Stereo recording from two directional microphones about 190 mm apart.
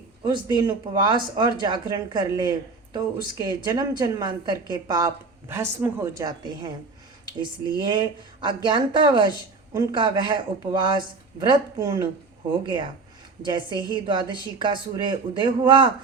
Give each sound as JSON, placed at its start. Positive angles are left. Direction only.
{"t": 0.2, "sound": "speech", "side_deg": -25}
{"t": 7.8, "sound": "speech", "side_deg": -25}